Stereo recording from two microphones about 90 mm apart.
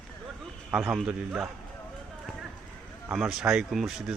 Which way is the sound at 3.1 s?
5° right (ahead or behind).